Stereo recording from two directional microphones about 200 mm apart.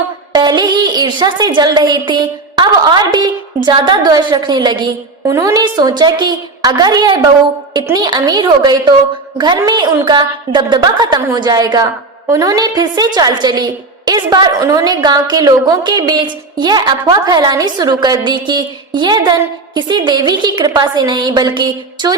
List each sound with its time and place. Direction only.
0.3 s a woman's voice: 20° right (ahead or behind)